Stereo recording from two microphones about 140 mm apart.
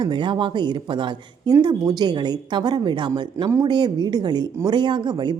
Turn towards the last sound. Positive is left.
turn(degrees=-30)  # may be behind; listen again after turning